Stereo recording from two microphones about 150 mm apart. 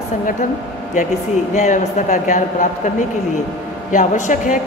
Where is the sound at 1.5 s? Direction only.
55° left (ahead or behind).